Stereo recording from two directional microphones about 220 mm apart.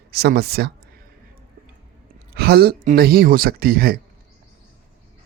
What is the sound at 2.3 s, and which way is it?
Speech, 45° right (ahead or behind).